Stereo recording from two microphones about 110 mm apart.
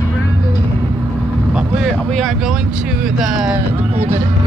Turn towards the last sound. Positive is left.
turn(degrees=-5)  # may be behind; listen again after turning